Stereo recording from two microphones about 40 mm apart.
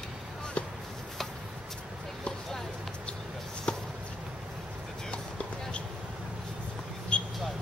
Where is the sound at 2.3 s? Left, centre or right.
Centre.